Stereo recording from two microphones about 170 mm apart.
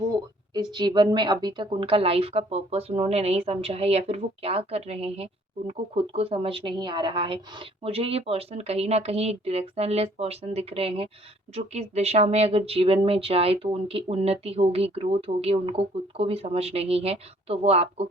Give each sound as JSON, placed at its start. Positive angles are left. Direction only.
{"t": 0.5, "sound": "a woman's voice", "side_deg": -25}